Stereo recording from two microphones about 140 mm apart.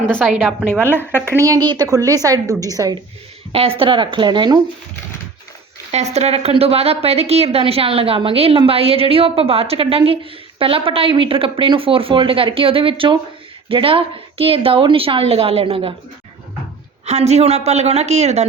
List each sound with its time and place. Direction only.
0.1 s a woman's voice: 5° left (ahead or behind)
1.1 s a woman's voice: 20° right (ahead or behind)
3.5 s speech: 45° right (ahead or behind)
5.9 s a woman's voice: 50° right (ahead or behind)
17.1 s a woman's voice: 50° right (ahead or behind)